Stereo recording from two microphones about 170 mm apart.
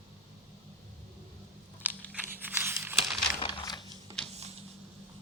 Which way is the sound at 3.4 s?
25° left (ahead or behind).